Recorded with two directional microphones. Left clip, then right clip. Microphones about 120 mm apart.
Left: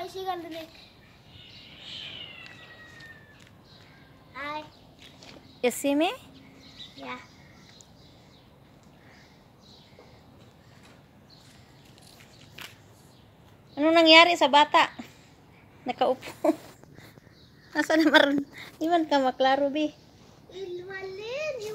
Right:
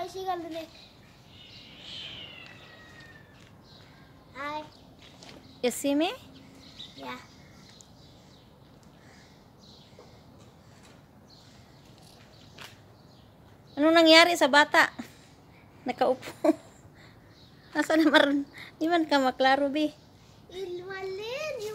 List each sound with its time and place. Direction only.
0.1 s a child's voice: 30° right (ahead or behind)
4.3 s a child's voice: 5° right (ahead or behind)
5.6 s speech: 10° left (ahead or behind)
13.7 s a woman's voice: 15° right (ahead or behind)
17.7 s a woman's voice: centre (ahead or behind)
20.5 s child singing: 5° right (ahead or behind)